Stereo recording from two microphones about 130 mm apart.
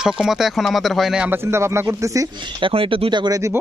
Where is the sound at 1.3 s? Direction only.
20° right (ahead or behind).